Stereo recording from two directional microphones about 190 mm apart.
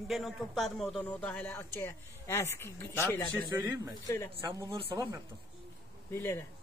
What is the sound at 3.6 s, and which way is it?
Speech, 10° right (ahead or behind).